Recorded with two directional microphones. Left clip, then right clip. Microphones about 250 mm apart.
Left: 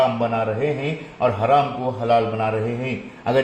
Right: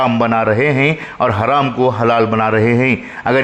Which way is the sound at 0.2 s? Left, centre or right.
Right.